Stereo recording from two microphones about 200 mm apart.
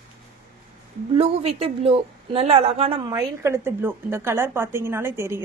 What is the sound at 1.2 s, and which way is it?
A woman's voice, 30° right (ahead or behind).